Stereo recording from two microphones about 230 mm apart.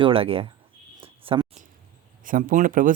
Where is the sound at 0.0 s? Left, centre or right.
Right.